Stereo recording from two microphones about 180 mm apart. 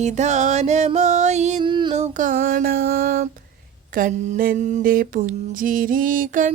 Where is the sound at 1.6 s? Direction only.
25° right (ahead or behind); by 6.5 s 50° right (ahead or behind).